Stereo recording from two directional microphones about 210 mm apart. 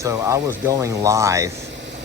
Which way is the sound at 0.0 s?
15° right (ahead or behind).